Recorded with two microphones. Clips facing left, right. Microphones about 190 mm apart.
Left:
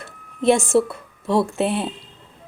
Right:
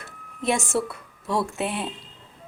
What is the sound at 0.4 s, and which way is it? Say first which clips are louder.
Speech: left 8 dB; 30° left (ahead or behind).